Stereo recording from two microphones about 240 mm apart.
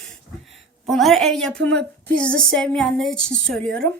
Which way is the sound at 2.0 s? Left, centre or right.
Centre.